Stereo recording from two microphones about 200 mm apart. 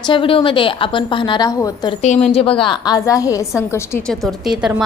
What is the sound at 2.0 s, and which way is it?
A woman's voice, 35° left (ahead or behind).